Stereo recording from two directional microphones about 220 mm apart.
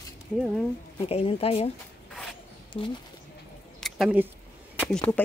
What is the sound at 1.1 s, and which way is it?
Speech, 25° left (ahead or behind).